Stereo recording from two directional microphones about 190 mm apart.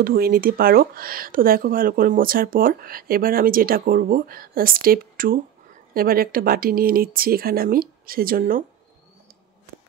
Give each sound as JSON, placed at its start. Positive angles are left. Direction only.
{"t": 0.0, "sound": "speech", "side_deg": -50}